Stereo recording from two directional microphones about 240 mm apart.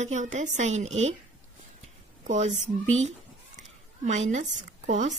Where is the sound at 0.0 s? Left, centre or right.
Right.